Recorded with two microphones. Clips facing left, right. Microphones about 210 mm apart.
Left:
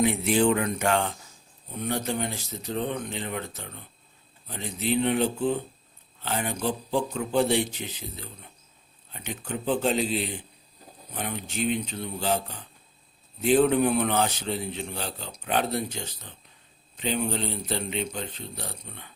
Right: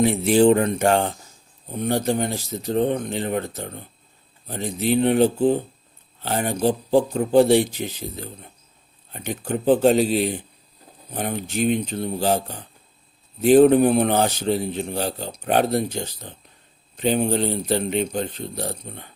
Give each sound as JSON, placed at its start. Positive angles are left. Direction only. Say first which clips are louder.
{"t": 0.0, "sound": "a man's voice", "louder": "right 6 dB", "side_deg": -35}